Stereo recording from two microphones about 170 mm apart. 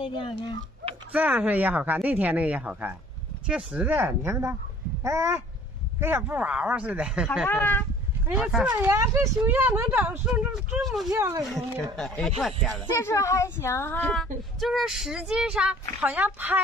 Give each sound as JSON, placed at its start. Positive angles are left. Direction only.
{"t": 0.0, "sound": "speech", "side_deg": 30}
{"t": 1.1, "sound": "speech", "side_deg": -10}
{"t": 7.4, "sound": "a child's voice", "side_deg": 10}
{"t": 8.3, "sound": "speech", "side_deg": -5}
{"t": 8.7, "sound": "speech", "side_deg": -15}
{"t": 11.1, "sound": "speech", "side_deg": -20}
{"t": 11.5, "sound": "speech", "side_deg": 5}
{"t": 12.9, "sound": "a child's voice", "side_deg": 15}
{"t": 14.1, "sound": "speech", "side_deg": 0}